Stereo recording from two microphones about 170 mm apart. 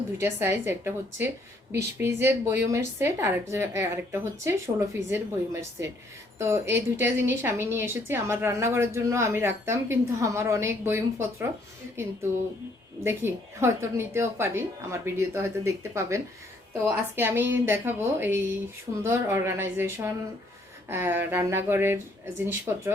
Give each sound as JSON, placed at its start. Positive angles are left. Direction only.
{"t": 0.2, "sound": "a woman's voice", "side_deg": -15}
{"t": 13.0, "sound": "a woman's voice", "side_deg": -15}